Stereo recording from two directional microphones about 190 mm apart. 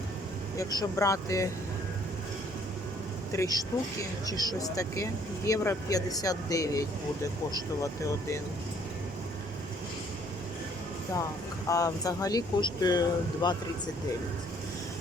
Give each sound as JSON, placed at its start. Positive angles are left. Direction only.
{"t": 0.5, "sound": "speech", "side_deg": 20}
{"t": 3.3, "sound": "speech", "side_deg": 20}
{"t": 11.7, "sound": "speech", "side_deg": 20}